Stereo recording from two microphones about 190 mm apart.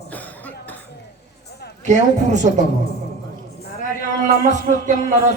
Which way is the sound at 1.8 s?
40° right (ahead or behind).